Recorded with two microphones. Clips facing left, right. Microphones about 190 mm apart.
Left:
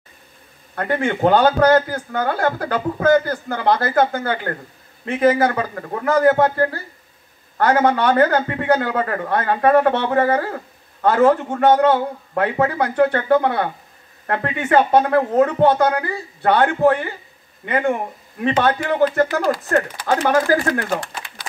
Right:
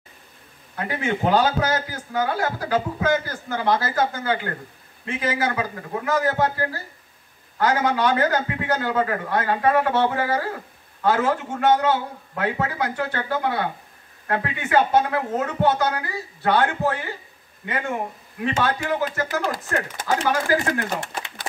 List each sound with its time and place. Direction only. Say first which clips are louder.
0.7 s speech: left 5 dB; 60° left (ahead or behind)
20.1 s speech: left 4 dB; 50° left (ahead or behind)